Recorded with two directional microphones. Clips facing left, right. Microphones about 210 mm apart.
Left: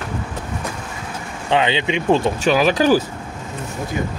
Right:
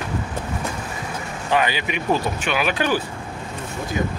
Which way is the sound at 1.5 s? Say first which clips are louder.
Left 4 dB; 25° left (ahead or behind).